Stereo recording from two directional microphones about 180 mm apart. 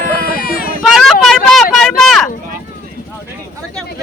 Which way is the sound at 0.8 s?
Centre (ahead or behind).